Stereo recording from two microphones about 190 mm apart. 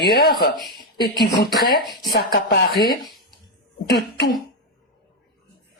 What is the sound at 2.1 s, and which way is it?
Speech, 50° left (ahead or behind).